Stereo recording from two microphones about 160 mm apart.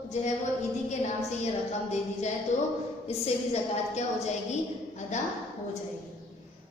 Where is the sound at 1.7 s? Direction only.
45° left (ahead or behind).